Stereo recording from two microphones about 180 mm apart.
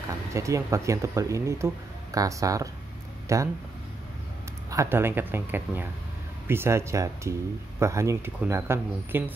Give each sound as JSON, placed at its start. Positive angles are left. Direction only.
{"t": 0.3, "sound": "speech", "side_deg": -15}
{"t": 4.6, "sound": "speech", "side_deg": -15}